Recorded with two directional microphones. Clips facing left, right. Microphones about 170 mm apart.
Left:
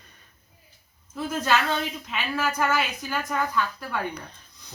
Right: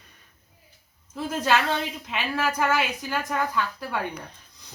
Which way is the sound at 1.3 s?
10° right (ahead or behind).